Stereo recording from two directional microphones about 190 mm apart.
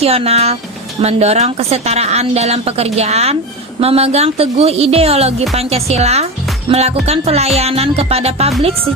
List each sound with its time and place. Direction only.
0.0 s a woman's voice: 30° right (ahead or behind)